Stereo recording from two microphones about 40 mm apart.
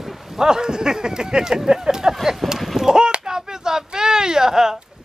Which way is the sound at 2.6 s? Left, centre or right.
Centre.